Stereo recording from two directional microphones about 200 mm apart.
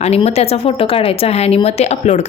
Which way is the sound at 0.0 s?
30° left (ahead or behind).